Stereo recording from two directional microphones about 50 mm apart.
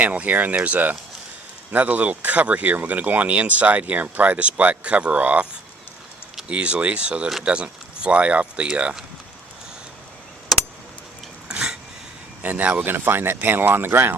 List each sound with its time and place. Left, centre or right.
0.0 s speech: right
6.5 s speech: right
10.5 s keys jangling: centre
11.4 s a sound: centre
12.4 s speech: right
12.8 s speech: right